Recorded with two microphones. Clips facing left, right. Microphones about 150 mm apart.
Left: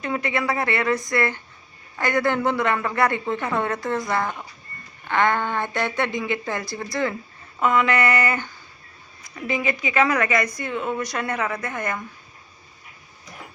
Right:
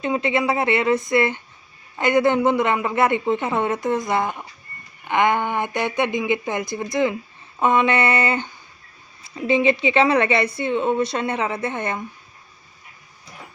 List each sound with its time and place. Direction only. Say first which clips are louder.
0.0 s a woman's voice: right 4 dB; 20° right (ahead or behind)